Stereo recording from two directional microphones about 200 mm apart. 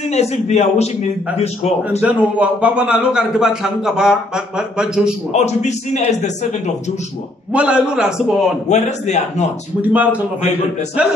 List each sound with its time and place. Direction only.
0.1 s a man's voice: 35° left (ahead or behind)
1.9 s a man's voice: 10° right (ahead or behind)
5.3 s a man's voice: 35° left (ahead or behind)
7.5 s a man's voice: 5° right (ahead or behind)
8.6 s a man's voice: 35° left (ahead or behind)
9.8 s speech: 5° right (ahead or behind)